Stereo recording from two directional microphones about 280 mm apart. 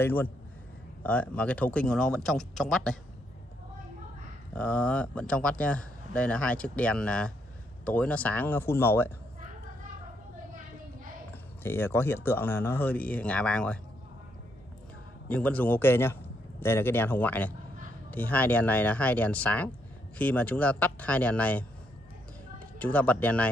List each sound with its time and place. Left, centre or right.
0.0 s a man's voice: centre
4.6 s a man's voice: centre
11.6 s a man's voice: centre
15.2 s a man's voice: centre
22.8 s speech: centre